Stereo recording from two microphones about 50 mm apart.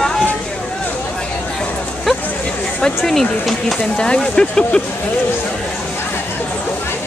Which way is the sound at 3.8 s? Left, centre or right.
Centre.